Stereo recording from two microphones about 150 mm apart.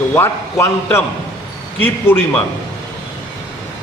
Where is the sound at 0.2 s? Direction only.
15° left (ahead or behind).